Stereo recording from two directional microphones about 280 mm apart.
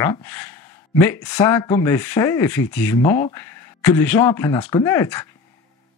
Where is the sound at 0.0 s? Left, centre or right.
Centre.